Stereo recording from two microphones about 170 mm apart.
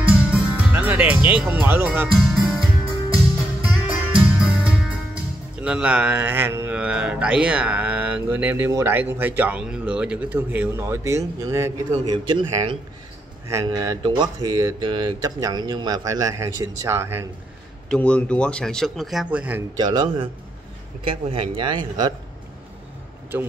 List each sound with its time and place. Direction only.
0.0 s music: 10° right (ahead or behind)
3.8 s speech: 10° right (ahead or behind)
17.8 s speech: 5° left (ahead or behind)
19.8 s speech: 25° right (ahead or behind)